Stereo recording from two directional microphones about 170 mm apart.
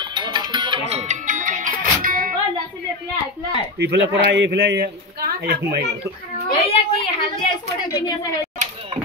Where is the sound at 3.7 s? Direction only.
85° right.